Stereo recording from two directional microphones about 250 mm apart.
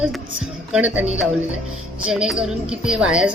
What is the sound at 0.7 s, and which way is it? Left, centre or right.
Speech, centre.